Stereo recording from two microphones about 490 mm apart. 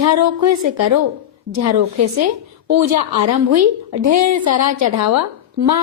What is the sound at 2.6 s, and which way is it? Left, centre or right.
A woman's voice, right.